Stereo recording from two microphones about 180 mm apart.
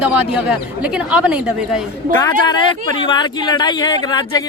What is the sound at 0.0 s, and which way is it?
A woman's voice, 5° right (ahead or behind).